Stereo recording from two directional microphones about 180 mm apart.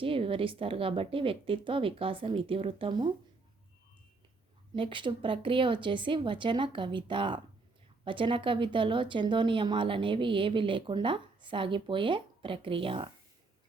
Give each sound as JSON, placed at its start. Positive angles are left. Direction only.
{"t": 0.0, "sound": "speech", "side_deg": -30}
{"t": 4.7, "sound": "speech", "side_deg": -30}